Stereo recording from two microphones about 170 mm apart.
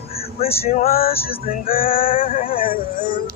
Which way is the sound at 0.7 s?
60° left (ahead or behind).